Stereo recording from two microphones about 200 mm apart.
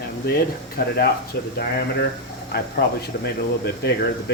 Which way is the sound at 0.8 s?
55° left (ahead or behind).